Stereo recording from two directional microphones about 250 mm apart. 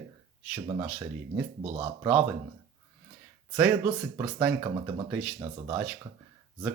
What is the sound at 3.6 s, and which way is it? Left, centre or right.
Speech, centre.